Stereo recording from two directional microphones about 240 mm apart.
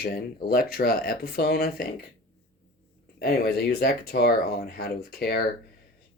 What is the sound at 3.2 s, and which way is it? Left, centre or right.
Speech, left.